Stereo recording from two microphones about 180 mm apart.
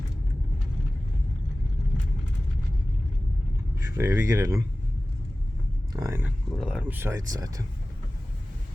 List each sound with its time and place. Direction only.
3.8 s speech: 15° right (ahead or behind)
5.9 s speech: 20° right (ahead or behind)
6.2 s speech: 5° right (ahead or behind); by 7.6 s 20° right (ahead or behind)